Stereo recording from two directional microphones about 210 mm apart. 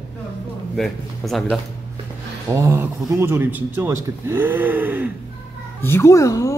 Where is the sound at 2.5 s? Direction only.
15° right (ahead or behind).